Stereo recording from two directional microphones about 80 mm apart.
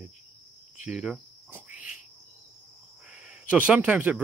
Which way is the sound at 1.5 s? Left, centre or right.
Centre.